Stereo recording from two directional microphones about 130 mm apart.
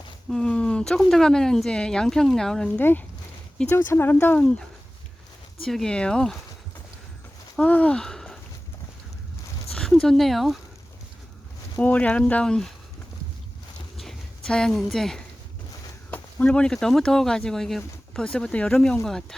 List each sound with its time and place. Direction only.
0.3 s speech: 5° left (ahead or behind)
3.6 s speech: 15° left (ahead or behind)
5.6 s speech: 5° left (ahead or behind)
7.5 s speech: 10° left (ahead or behind)
9.7 s speech: 5° left (ahead or behind)
11.8 s speech: 10° left (ahead or behind)
13.9 s a sound: centre (ahead or behind)
16.1 s speech: 10° left (ahead or behind)